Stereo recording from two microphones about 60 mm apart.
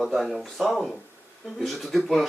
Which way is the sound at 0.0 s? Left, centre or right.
Centre.